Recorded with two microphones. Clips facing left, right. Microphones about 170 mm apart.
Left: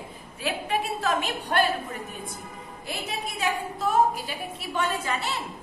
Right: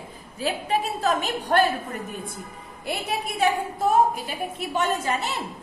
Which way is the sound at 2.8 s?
55° right (ahead or behind).